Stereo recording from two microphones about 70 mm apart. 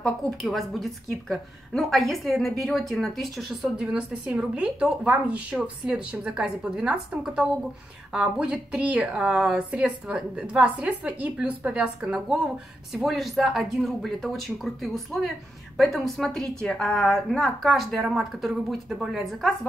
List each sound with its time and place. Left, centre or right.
0.0 s a woman's voice: centre